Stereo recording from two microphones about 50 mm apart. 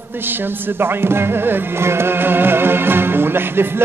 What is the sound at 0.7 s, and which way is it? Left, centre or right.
Music, right.